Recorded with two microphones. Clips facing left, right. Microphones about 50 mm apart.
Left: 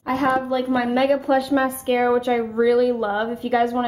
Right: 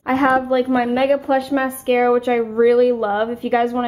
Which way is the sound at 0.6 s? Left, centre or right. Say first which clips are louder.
Right 3 dB; centre.